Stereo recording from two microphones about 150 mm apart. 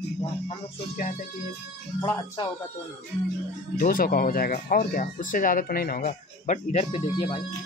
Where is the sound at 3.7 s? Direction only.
75° left (ahead or behind); by 6.8 s 55° left (ahead or behind).